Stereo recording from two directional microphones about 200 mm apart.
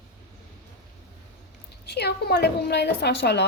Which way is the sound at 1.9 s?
55° left (ahead or behind).